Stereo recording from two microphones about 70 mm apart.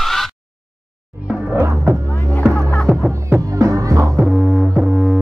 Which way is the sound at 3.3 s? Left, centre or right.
Right.